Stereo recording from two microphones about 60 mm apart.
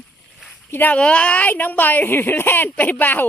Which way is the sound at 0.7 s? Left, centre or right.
Left.